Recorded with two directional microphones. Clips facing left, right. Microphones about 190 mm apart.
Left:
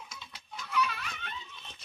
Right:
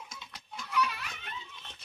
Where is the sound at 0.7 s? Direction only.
10° right (ahead or behind).